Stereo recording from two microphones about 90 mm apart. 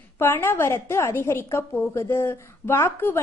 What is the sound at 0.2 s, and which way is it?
A woman's voice, 25° left (ahead or behind).